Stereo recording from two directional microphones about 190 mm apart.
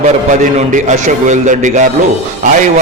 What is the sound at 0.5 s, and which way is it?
A man's voice, 40° right (ahead or behind).